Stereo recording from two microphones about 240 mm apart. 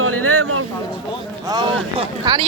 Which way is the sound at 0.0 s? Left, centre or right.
Right.